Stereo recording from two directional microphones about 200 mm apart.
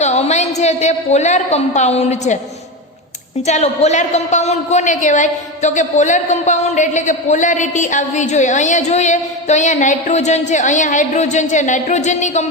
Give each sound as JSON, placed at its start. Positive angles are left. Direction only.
{"t": 0.0, "sound": "a man's voice", "side_deg": 35}
{"t": 3.4, "sound": "a man's voice", "side_deg": 35}